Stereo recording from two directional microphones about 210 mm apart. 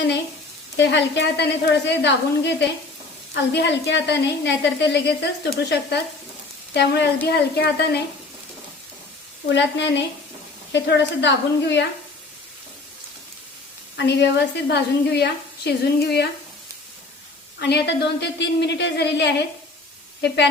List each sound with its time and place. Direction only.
0.8 s a woman's voice: 55° left (ahead or behind)
9.6 s speech: 55° left (ahead or behind)
13.9 s a woman's voice: 55° left (ahead or behind)
17.6 s speech: 55° left (ahead or behind)